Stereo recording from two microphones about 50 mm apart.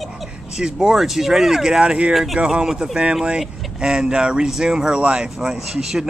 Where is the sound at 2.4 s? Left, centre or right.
Centre.